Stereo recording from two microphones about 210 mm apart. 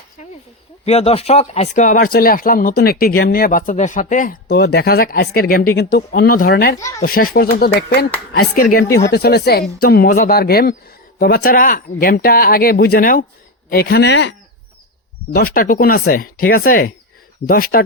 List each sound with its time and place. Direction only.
0.9 s speech: 30° left (ahead or behind); by 6.7 s 45° left (ahead or behind)
6.7 s speech: 15° left (ahead or behind)
7.0 s speech: 45° left (ahead or behind)
15.3 s speech: 45° left (ahead or behind)